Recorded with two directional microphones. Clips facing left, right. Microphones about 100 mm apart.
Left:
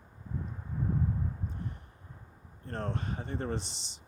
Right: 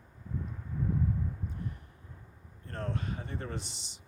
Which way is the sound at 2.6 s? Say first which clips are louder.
Left 1 dB; 30° left (ahead or behind).